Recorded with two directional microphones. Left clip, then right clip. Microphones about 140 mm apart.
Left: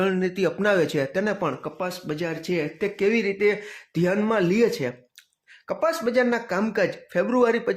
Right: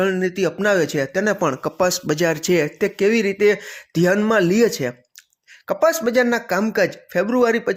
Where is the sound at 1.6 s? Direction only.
55° right (ahead or behind).